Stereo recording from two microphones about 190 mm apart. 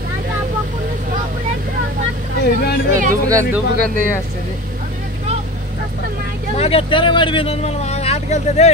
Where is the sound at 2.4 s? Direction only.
60° left (ahead or behind).